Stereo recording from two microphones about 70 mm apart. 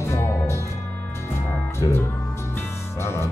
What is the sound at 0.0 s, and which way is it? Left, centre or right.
Music, left.